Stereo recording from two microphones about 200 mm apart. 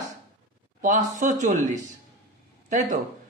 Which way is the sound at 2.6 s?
40° right (ahead or behind).